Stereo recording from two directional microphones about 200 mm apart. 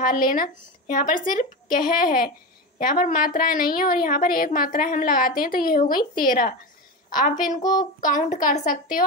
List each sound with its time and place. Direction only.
0.0 s a woman's voice: 45° left (ahead or behind)